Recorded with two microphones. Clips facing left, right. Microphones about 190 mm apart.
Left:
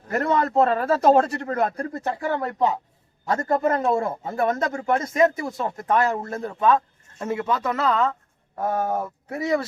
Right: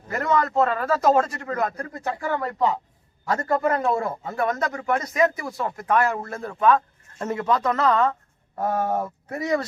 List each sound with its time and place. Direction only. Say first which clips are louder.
0.2 s speech: left 1 dB; 30° left (ahead or behind)
7.3 s speech: right 3 dB; 5° left (ahead or behind)